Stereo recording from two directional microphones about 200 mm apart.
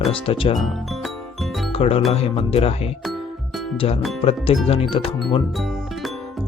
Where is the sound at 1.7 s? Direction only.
30° left (ahead or behind).